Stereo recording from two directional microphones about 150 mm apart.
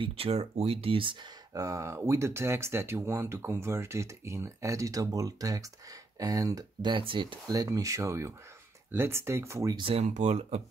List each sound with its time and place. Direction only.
0.0 s speech: 40° right (ahead or behind)
1.5 s speech: 20° right (ahead or behind)
9.8 s speech: 45° right (ahead or behind)